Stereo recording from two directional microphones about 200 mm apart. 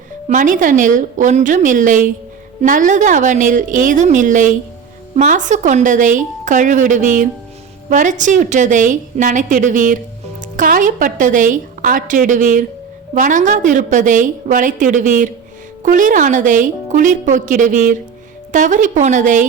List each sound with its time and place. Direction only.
0.3 s a woman's voice: 40° right (ahead or behind)